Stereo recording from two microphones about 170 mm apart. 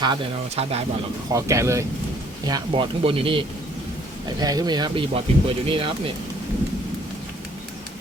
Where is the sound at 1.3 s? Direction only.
20° right (ahead or behind).